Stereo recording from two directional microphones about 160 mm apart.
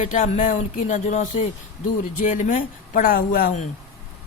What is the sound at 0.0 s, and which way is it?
Speech, 50° left (ahead or behind).